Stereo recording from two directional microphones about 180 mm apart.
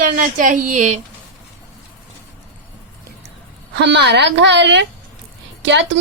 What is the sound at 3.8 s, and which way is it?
A woman's voice, 75° right (ahead or behind).